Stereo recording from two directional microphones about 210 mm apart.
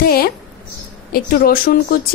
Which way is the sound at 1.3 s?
45° left (ahead or behind).